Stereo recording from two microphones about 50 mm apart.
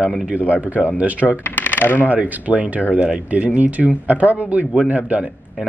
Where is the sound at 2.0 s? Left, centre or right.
Right.